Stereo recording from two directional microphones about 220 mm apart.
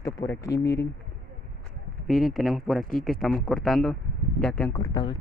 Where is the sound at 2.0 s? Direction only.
Centre (ahead or behind).